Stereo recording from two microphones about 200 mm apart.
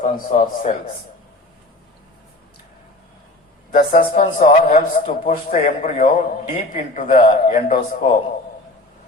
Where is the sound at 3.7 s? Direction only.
40° left (ahead or behind).